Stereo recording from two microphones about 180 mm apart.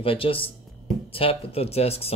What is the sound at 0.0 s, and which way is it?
Speech, 30° left (ahead or behind).